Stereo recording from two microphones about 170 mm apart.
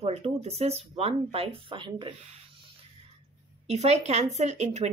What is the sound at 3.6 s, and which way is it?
Speech, 40° right (ahead or behind).